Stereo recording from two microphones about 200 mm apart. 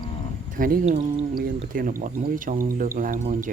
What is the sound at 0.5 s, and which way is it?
Speech, 45° right (ahead or behind).